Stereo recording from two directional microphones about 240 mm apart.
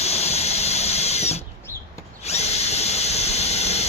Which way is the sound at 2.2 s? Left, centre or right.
Left.